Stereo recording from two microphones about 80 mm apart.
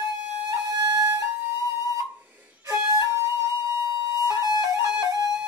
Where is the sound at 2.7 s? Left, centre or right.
Right.